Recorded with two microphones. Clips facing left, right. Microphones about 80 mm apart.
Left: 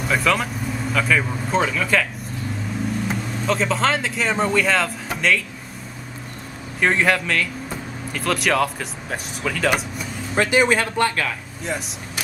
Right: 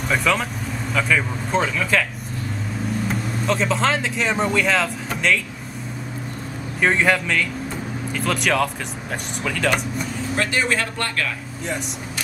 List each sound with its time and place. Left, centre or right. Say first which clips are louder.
0.1 s speech: even; centre
3.1 s speech: even; centre
6.8 s speech: even; centre
10.3 s speech: left 5 dB; centre